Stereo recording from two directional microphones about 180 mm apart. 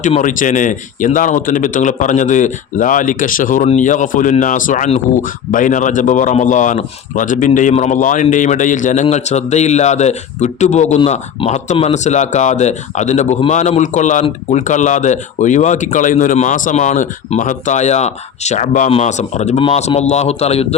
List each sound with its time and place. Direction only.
0.0 s a man's voice: 45° left (ahead or behind)